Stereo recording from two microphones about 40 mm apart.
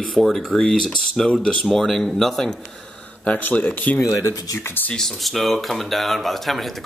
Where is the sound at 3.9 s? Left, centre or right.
Left.